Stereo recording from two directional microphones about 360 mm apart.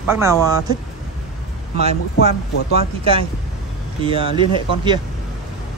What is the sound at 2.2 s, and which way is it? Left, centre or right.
Speech, centre.